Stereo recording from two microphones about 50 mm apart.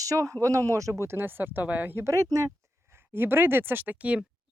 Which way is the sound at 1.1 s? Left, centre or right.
Right.